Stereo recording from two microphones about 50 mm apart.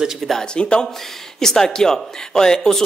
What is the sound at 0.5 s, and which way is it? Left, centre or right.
Speech, centre.